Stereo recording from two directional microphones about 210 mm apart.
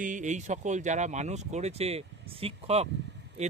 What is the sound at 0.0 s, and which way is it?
Speech, 35° right (ahead or behind).